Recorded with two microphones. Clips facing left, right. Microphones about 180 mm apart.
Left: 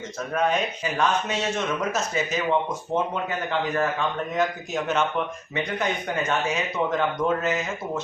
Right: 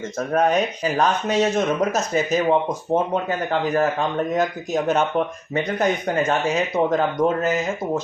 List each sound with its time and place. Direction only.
0.2 s speech: 40° right (ahead or behind)